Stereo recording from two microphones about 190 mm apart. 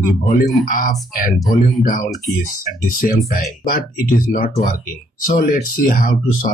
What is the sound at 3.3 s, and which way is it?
Speech, 50° left (ahead or behind).